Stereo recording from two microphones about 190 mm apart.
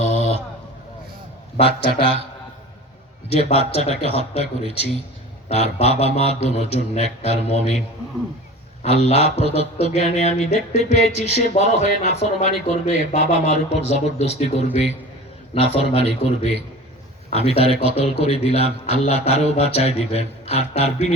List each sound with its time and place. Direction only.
0.0 s a sound: 35° left (ahead or behind)
3.2 s speech: 35° left (ahead or behind)
8.8 s speech: 35° left (ahead or behind)